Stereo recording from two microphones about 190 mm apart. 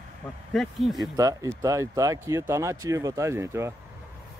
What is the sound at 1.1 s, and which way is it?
Speech, 15° right (ahead or behind).